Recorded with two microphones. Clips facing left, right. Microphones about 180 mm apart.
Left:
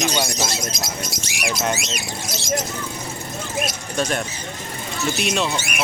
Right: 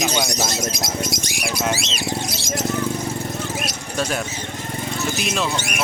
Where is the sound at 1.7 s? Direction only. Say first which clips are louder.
Right 1 dB; 30° right (ahead or behind).